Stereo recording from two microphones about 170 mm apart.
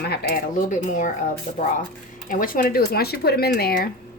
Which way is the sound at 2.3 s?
55° left (ahead or behind).